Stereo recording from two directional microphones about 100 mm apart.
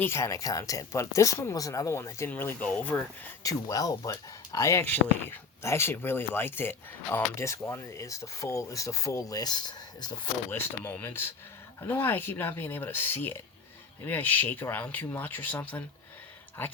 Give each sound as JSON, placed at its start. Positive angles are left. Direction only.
{"t": 0.0, "sound": "speech", "side_deg": 25}
{"t": 3.4, "sound": "speech", "side_deg": 35}
{"t": 10.5, "sound": "speech", "side_deg": 20}